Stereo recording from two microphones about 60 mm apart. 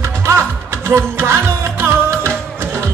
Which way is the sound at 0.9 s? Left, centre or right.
Right.